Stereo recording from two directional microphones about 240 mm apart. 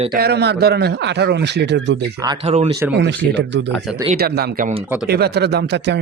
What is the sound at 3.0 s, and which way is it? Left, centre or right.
A man's voice, right.